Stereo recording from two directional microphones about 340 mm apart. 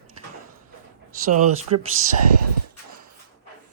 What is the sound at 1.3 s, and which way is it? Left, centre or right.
Speech, right.